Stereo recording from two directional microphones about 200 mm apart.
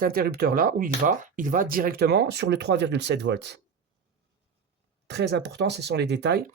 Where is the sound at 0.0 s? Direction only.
45° right (ahead or behind).